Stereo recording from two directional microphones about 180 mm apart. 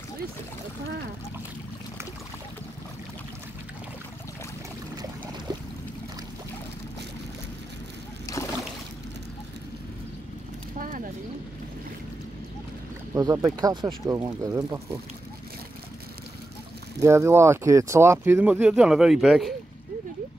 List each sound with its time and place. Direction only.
8.3 s boat: 20° left (ahead or behind)
10.8 s a sound: 45° right (ahead or behind)
13.1 s speech: 15° right (ahead or behind)
17.0 s speech: 15° right (ahead or behind)